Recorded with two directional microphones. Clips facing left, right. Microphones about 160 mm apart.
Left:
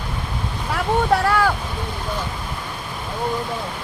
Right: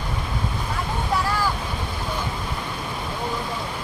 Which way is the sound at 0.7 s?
65° left (ahead or behind).